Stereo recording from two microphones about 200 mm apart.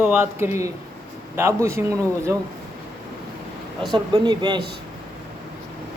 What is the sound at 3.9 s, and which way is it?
Speech, 20° right (ahead or behind).